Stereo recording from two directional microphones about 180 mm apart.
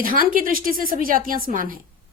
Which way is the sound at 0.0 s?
50° right (ahead or behind).